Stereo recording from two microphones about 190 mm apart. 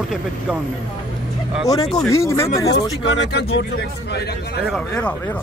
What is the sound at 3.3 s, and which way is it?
Speech, 60° left (ahead or behind).